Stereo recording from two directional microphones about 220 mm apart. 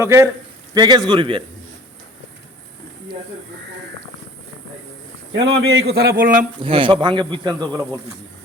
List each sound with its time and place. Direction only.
0.0 s a man's voice: 10° right (ahead or behind)
5.3 s a man's voice: 55° right (ahead or behind)
6.6 s speech: 25° right (ahead or behind)